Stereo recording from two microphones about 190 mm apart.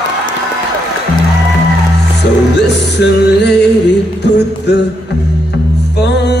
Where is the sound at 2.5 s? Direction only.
65° left (ahead or behind).